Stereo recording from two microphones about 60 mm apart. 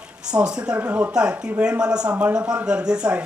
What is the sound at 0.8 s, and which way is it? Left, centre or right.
Speech, right.